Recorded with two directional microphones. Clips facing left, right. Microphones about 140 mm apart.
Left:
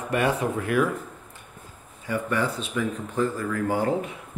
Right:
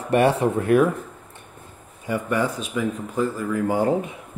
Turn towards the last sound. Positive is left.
turn(degrees=-20)  # may be behind; listen again after turning